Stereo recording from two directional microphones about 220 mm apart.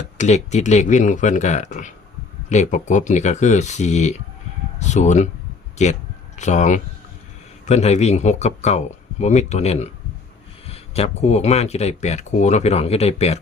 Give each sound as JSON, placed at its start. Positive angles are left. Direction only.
{"t": 0.2, "sound": "speech", "side_deg": 30}